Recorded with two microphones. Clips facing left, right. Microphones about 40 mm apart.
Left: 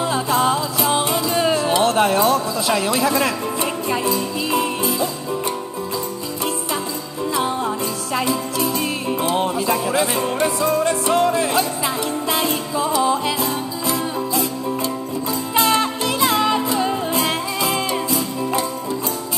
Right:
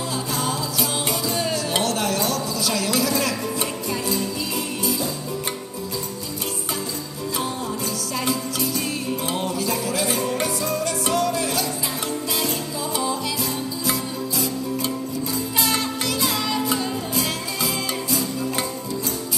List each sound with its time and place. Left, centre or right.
0.0 s music: left
1.7 s speech: left
3.9 s music: left
7.3 s music: left
15.5 s music: left